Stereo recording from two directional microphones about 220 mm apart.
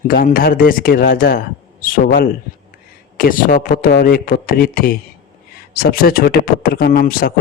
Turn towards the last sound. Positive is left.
turn(degrees=40)  # may be behind; listen again after turning